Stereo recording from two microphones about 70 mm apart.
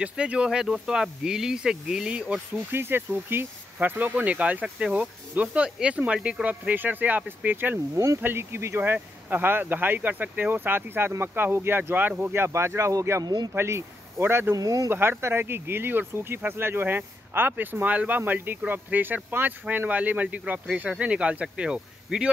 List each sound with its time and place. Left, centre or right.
0.0 s speech: centre
2.7 s speech: right; by 6.4 s centre
6.4 s speech: right
7.9 s speech: right
8.2 s speech: right
13.2 s speech: right
13.6 s speech: right
14.5 s speech: right
14.9 s speech: right; by 22.3 s centre